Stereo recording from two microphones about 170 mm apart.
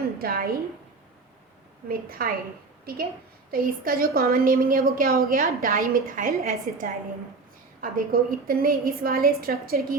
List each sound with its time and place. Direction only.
0.2 s a woman's voice: 60° right (ahead or behind)
1.9 s a woman's voice: 60° right (ahead or behind)
3.5 s a woman's voice: 60° right (ahead or behind)